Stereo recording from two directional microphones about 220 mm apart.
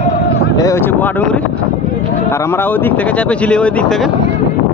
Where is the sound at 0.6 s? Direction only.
10° left (ahead or behind).